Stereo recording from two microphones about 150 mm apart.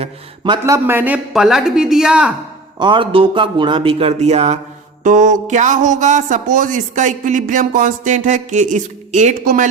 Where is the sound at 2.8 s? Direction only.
30° right (ahead or behind).